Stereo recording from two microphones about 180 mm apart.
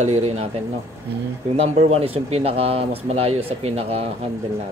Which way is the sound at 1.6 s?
35° right (ahead or behind).